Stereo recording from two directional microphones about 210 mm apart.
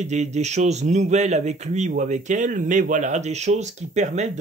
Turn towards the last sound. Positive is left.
turn(degrees=-35)  # may be behind; listen again after turning